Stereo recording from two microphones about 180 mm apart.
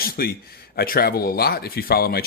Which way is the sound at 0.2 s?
60° left (ahead or behind).